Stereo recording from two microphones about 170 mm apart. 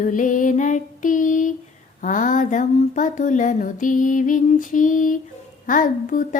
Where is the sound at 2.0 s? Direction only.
50° left (ahead or behind).